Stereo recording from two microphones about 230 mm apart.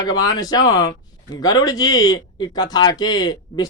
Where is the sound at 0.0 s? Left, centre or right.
Centre.